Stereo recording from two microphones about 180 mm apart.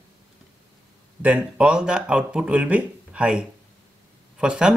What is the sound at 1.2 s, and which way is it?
Speech, 5° right (ahead or behind).